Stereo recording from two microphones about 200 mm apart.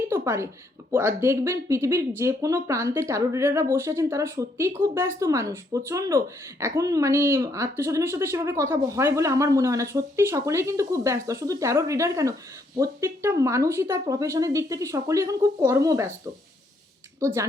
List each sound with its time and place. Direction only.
0.1 s a sound: 15° right (ahead or behind)
0.9 s speech: 10° right (ahead or behind)
17.2 s speech: 15° right (ahead or behind)